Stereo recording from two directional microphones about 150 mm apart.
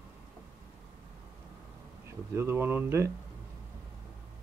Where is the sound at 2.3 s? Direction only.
15° right (ahead or behind).